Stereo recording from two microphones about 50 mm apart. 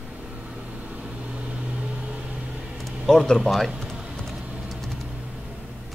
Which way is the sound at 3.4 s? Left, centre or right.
Centre.